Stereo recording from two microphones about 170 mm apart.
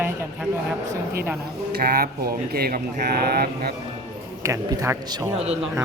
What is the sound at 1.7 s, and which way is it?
Speech, 65° right (ahead or behind).